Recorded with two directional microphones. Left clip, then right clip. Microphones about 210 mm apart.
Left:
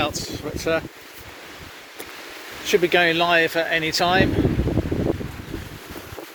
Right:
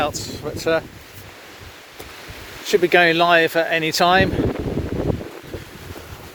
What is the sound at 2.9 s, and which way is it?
Speech, 50° right (ahead or behind).